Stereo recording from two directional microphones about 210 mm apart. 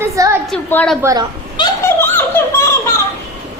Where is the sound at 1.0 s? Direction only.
15° right (ahead or behind).